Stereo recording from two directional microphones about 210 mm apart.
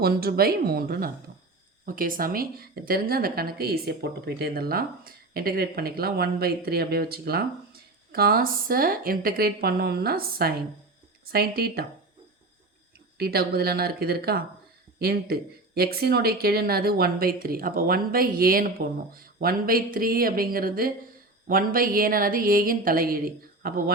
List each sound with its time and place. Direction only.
0.0 s a woman's voice: 45° right (ahead or behind)
13.1 s a woman's voice: 50° right (ahead or behind)